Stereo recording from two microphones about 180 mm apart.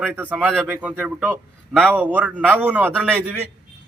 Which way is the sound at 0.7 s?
5° right (ahead or behind).